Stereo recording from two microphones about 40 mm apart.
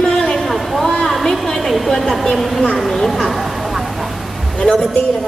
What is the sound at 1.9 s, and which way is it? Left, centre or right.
A woman's voice, centre.